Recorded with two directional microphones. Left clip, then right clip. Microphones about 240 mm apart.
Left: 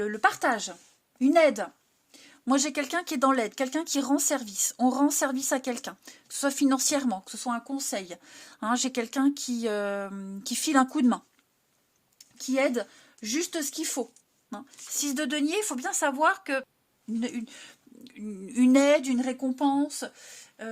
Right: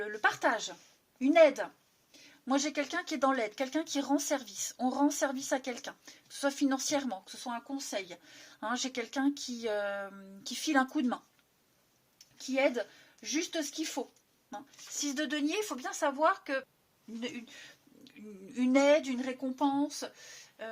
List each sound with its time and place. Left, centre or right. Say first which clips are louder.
0.0 s speech: left 5 dB; left
12.4 s speech: left 4 dB; left